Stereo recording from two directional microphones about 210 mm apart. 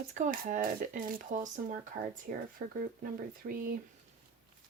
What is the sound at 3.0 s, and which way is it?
Speech, 40° right (ahead or behind).